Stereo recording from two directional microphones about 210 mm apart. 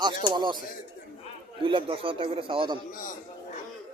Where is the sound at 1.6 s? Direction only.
25° right (ahead or behind).